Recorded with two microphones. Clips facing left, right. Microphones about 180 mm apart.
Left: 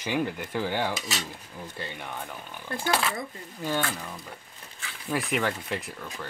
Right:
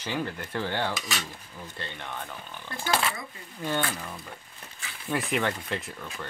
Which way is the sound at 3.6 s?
5° left (ahead or behind).